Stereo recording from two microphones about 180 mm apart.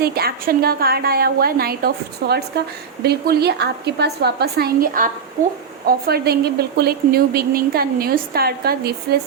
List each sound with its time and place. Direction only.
0.0 s a woman's voice: 60° right (ahead or behind)